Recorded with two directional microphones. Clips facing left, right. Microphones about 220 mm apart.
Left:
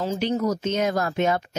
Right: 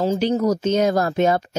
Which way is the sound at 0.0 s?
35° right (ahead or behind).